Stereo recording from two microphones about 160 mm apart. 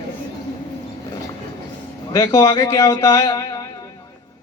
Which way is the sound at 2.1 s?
20° left (ahead or behind).